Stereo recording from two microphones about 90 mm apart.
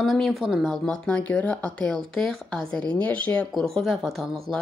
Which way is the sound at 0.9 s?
10° left (ahead or behind).